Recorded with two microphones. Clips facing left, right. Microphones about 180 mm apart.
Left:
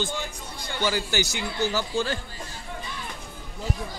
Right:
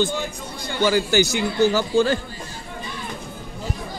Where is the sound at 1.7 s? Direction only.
90° right.